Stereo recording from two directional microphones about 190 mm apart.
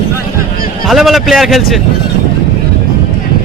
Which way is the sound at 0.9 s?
Centre (ahead or behind).